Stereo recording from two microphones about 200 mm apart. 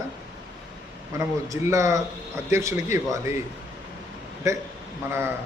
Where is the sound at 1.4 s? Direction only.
15° right (ahead or behind).